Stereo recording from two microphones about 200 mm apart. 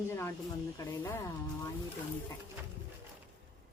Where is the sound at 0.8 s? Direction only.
15° left (ahead or behind).